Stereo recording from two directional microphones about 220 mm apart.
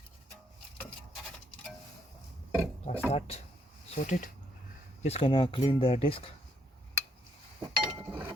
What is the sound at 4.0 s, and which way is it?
Speech, 35° left (ahead or behind).